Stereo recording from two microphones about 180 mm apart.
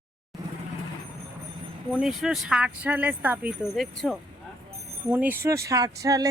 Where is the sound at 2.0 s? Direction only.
Centre (ahead or behind).